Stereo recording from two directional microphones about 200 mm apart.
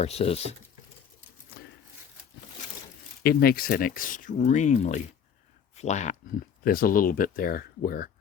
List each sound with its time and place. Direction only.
0.0 s speech: 30° left (ahead or behind)
3.2 s speech: 50° left (ahead or behind)
6.7 s speech: 45° left (ahead or behind)